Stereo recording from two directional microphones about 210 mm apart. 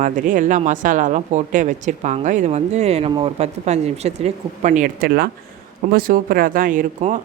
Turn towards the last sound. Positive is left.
turn(degrees=-40)  # may be behind; listen again after turning